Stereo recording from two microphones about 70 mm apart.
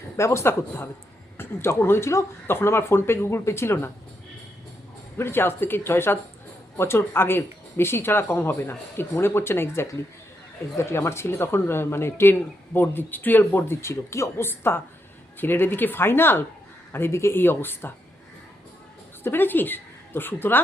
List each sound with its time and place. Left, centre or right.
0.2 s speech: left
5.1 s speech: left
19.2 s speech: left